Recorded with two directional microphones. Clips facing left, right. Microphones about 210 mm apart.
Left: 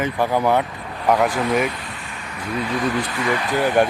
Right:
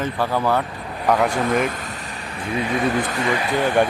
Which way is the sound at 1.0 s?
5° left (ahead or behind).